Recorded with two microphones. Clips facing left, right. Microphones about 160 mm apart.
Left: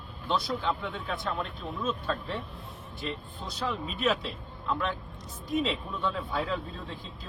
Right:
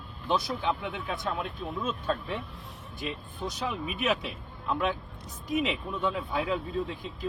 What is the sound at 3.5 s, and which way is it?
Speech, 15° right (ahead or behind).